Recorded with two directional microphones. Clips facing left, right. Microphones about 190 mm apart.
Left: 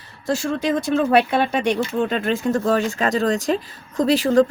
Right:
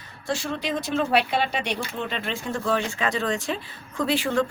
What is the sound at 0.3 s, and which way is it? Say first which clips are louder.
Speech: left 7 dB; 45° left (ahead or behind).